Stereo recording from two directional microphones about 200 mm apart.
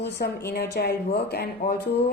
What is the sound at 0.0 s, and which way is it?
A woman's voice, 55° left (ahead or behind).